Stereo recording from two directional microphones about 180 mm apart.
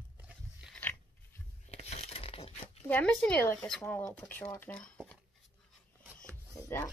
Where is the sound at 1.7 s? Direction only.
35° left (ahead or behind).